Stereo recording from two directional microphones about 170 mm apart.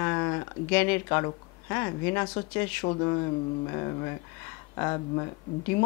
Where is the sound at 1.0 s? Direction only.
20° left (ahead or behind).